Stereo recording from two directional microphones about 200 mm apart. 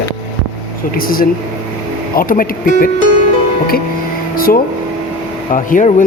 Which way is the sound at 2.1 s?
45° left (ahead or behind).